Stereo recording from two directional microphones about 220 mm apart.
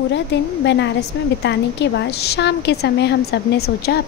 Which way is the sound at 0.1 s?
55° left (ahead or behind).